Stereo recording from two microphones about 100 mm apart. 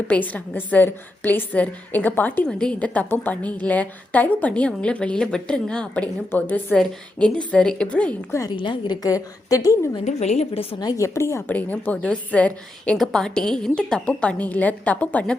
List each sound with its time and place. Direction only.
0.1 s a woman's voice: 15° left (ahead or behind)
8.4 s a woman's voice: 55° left (ahead or behind)
9.0 s a woman's voice: 35° left (ahead or behind)
10.2 s a woman's voice: 90° left
10.8 s a woman's voice: 45° left (ahead or behind)
11.0 s a woman's voice: 30° left (ahead or behind)
11.5 s a woman's voice: 15° left (ahead or behind)